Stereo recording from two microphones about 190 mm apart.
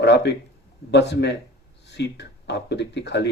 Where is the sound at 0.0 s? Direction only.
65° left (ahead or behind).